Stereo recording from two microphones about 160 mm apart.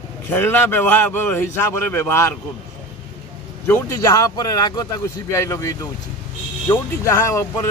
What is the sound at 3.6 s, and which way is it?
Speech, 20° left (ahead or behind).